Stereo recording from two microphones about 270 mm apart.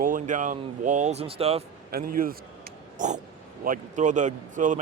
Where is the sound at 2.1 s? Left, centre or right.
Right.